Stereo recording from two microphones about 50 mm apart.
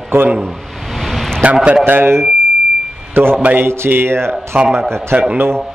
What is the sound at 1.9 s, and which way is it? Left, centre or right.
A man's voice, right.